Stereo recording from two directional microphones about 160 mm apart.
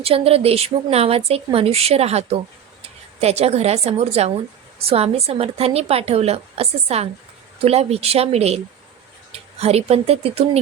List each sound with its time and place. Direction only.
0.0 s a woman's voice: 40° right (ahead or behind)